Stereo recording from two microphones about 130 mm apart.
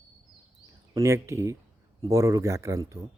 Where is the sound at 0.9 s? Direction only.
25° right (ahead or behind).